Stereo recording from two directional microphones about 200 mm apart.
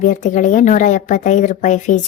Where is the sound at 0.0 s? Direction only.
40° left (ahead or behind).